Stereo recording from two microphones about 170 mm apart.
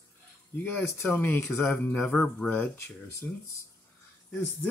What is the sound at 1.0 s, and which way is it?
Speech, 10° left (ahead or behind).